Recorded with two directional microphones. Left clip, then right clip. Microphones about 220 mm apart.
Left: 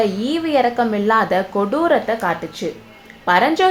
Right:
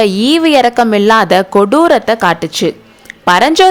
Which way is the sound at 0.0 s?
45° right (ahead or behind).